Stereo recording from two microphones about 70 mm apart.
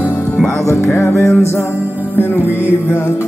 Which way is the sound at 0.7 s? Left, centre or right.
Left.